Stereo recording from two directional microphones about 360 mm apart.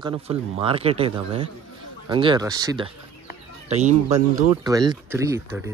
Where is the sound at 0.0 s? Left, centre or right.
Centre.